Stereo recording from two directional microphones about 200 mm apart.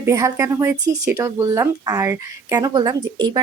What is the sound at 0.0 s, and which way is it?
Speech, 15° right (ahead or behind).